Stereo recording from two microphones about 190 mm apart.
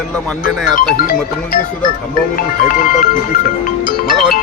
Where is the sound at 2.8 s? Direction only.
50° left (ahead or behind).